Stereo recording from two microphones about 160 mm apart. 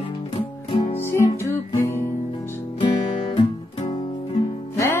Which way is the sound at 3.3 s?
40° left (ahead or behind).